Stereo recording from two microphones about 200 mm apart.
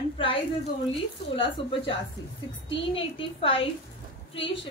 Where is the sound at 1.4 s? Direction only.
25° left (ahead or behind).